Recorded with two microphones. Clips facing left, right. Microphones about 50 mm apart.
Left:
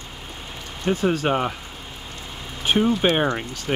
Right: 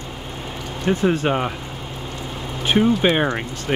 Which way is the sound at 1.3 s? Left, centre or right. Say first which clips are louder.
Right 1 dB; centre.